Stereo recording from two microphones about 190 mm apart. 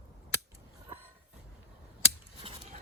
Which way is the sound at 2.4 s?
30° right (ahead or behind).